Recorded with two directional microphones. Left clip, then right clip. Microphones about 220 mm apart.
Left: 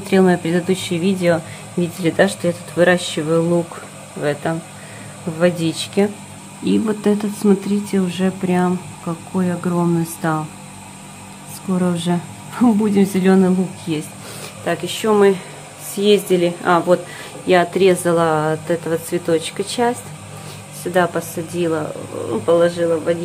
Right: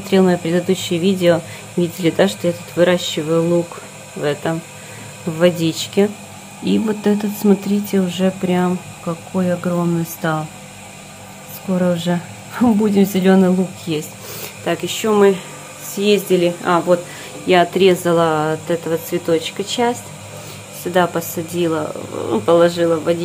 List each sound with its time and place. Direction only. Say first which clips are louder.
0.1 s speech: even; centre (ahead or behind)
11.7 s speech: right 3 dB; centre (ahead or behind)